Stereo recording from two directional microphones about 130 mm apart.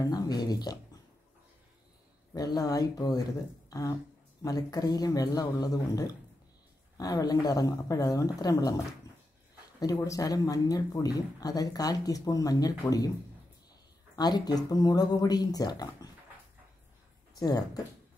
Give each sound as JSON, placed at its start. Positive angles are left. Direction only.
{"t": 0.0, "sound": "speech", "side_deg": 30}
{"t": 2.3, "sound": "speech", "side_deg": 30}
{"t": 4.4, "sound": "speech", "side_deg": 30}
{"t": 9.9, "sound": "speech", "side_deg": 25}
{"t": 14.1, "sound": "speech", "side_deg": 30}
{"t": 17.4, "sound": "speech", "side_deg": 30}